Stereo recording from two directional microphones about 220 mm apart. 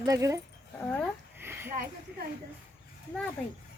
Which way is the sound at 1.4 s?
10° right (ahead or behind).